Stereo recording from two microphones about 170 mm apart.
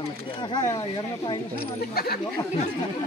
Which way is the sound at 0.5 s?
20° left (ahead or behind).